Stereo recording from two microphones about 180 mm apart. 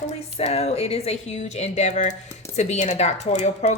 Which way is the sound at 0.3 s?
35° left (ahead or behind).